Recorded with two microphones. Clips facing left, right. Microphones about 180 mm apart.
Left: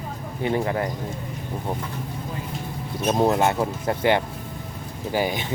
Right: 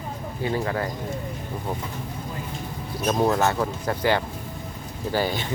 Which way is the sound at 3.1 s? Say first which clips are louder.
Left 1 dB; 20° left (ahead or behind).